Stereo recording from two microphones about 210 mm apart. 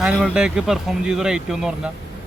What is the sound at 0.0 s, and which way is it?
Speech, 5° right (ahead or behind).